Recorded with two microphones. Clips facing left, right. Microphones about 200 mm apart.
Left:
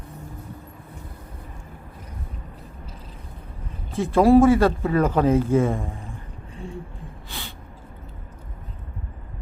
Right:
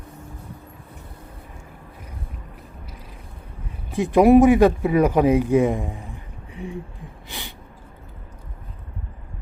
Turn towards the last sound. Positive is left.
turn(degrees=-15)  # may be behind; listen again after turning